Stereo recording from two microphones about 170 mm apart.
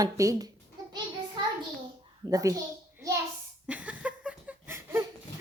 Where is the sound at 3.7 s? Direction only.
10° right (ahead or behind).